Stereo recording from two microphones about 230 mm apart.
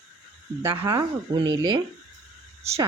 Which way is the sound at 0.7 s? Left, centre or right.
Centre.